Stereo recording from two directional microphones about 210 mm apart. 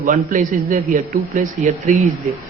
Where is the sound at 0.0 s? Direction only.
40° right (ahead or behind).